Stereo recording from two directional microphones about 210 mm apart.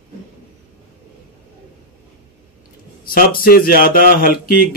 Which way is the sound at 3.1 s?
45° left (ahead or behind).